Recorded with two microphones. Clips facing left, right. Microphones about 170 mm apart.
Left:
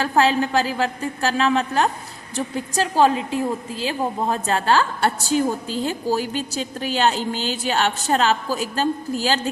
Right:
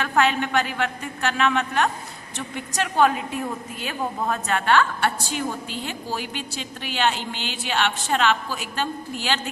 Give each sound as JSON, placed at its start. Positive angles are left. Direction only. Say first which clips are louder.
{"t": 0.0, "sound": "a woman's voice", "louder": "left 3 dB", "side_deg": 35}